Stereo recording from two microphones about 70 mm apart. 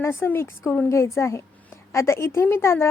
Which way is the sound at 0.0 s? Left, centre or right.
Left.